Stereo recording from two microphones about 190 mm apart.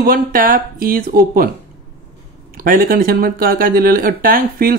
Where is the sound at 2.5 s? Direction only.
50° right (ahead or behind).